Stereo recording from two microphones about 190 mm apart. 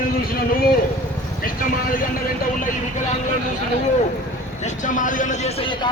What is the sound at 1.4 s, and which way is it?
Speech, 45° left (ahead or behind).